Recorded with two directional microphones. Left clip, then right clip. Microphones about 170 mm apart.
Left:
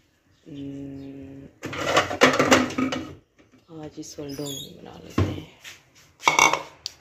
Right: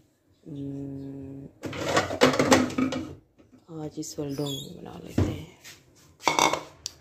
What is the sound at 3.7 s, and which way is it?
Speech, 25° right (ahead or behind).